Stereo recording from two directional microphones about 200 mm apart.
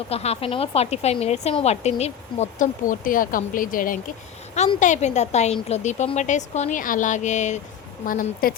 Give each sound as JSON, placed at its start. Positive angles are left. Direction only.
{"t": 0.1, "sound": "a woman's voice", "side_deg": 30}